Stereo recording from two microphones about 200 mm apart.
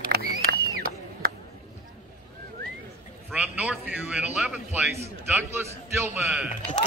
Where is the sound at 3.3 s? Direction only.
5° right (ahead or behind).